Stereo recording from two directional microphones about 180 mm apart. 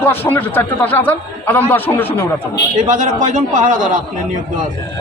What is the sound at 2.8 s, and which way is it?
A man's voice, 45° right (ahead or behind).